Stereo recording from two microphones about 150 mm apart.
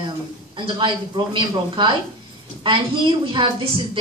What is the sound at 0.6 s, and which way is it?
A woman's voice, 35° right (ahead or behind).